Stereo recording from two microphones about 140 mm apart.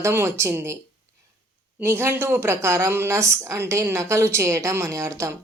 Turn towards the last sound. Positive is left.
turn(degrees=-20)  # may be behind; listen again after turning